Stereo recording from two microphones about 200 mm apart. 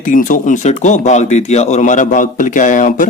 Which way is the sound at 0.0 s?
40° left (ahead or behind).